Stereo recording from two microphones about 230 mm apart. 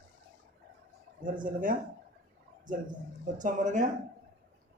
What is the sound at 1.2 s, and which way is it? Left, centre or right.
Speech, right.